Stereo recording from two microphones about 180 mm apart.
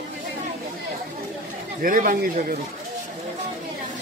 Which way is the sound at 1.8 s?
50° right (ahead or behind).